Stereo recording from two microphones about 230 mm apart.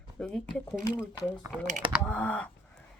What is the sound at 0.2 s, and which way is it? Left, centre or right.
Speech, centre.